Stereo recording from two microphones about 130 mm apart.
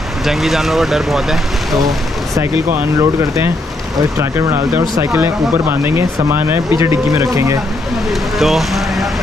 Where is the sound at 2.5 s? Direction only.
15° right (ahead or behind).